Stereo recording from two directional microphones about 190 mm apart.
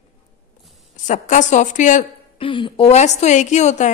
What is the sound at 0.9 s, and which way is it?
A woman's voice, 40° left (ahead or behind).